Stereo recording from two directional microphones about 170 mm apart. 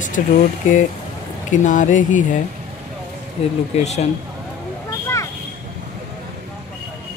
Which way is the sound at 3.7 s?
40° left (ahead or behind).